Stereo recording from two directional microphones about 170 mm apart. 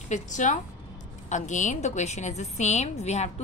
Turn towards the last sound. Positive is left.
turn(degrees=40)  # may be behind; listen again after turning